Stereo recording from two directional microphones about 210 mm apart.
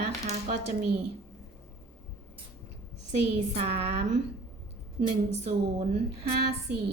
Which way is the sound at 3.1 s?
30° right (ahead or behind).